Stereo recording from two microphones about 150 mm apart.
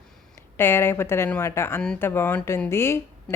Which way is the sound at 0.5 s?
15° left (ahead or behind).